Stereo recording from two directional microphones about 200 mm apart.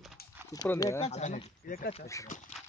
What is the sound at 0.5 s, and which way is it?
Speech, 15° left (ahead or behind).